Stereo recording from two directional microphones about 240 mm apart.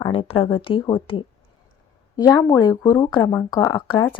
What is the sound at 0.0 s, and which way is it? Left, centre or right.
A woman's voice, left.